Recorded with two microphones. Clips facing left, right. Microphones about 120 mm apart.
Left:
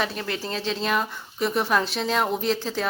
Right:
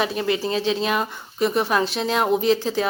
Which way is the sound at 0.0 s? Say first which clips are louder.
Right 6 dB; 10° right (ahead or behind).